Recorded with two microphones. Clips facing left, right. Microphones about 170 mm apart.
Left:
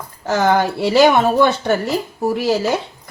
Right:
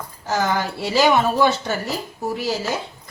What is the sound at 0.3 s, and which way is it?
Speech, 65° left (ahead or behind).